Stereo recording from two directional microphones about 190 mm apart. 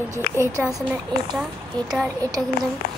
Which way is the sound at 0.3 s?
55° left (ahead or behind).